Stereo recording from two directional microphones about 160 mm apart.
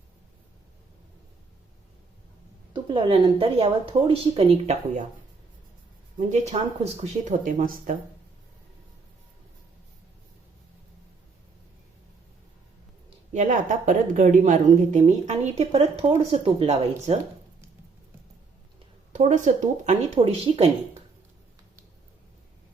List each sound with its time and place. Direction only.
2.7 s a woman's voice: 30° right (ahead or behind)
6.1 s speech: 45° right (ahead or behind)
13.3 s speech: 50° right (ahead or behind)
19.1 s speech: 50° right (ahead or behind)